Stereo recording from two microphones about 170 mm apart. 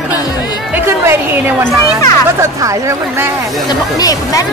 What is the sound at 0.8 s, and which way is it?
Speech, 15° right (ahead or behind).